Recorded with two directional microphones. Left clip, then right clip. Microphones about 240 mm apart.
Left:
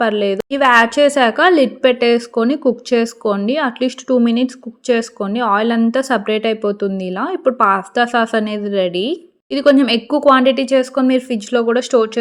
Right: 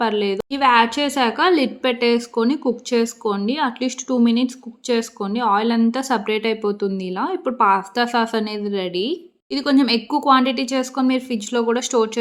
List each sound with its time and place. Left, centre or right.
0.0 s a woman's voice: centre